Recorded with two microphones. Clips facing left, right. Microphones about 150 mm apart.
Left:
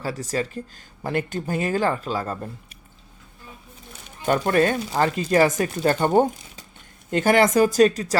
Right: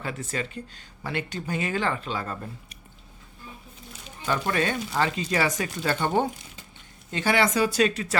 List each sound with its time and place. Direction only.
0.0 s speech: 35° left (ahead or behind)
4.3 s speech: 50° left (ahead or behind)